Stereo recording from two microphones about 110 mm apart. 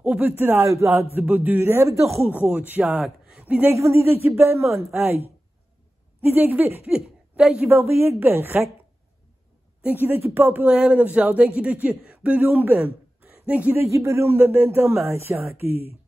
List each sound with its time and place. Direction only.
0.0 s a man's voice: 15° right (ahead or behind)
3.7 s a man's voice: 25° right (ahead or behind); by 7.6 s 10° right (ahead or behind)
7.6 s speech: 20° right (ahead or behind)
9.8 s speech: 20° right (ahead or behind)